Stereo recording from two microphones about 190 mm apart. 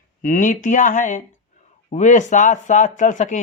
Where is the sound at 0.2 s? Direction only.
45° left (ahead or behind).